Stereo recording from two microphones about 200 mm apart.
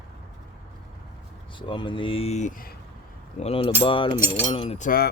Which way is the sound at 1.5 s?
25° left (ahead or behind).